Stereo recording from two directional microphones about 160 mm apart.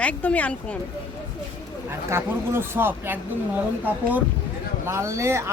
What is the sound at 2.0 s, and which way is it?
Speech, 15° right (ahead or behind).